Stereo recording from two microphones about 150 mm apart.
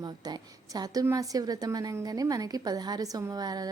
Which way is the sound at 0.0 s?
25° right (ahead or behind).